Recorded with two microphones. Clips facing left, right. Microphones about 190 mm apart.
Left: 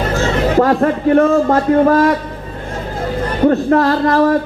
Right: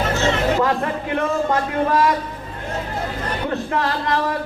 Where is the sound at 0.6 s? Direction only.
45° left (ahead or behind).